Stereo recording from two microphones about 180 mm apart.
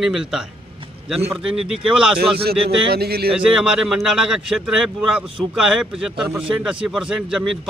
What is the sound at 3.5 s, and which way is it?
Speech, 5° right (ahead or behind).